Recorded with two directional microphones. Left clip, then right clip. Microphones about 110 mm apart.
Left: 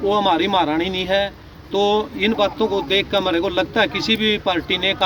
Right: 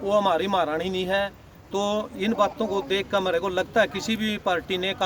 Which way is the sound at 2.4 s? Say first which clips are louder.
Left 6 dB; 65° right (ahead or behind).